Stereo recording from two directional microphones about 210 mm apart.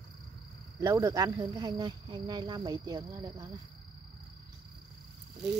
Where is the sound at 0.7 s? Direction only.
15° right (ahead or behind).